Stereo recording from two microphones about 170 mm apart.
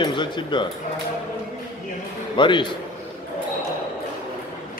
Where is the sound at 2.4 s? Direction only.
30° left (ahead or behind).